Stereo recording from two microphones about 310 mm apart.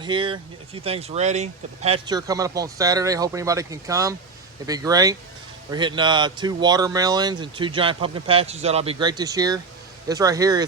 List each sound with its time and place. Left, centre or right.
0.0 s speech: centre